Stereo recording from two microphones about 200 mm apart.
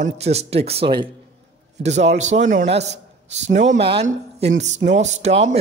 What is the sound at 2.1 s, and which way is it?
Speech, 35° right (ahead or behind).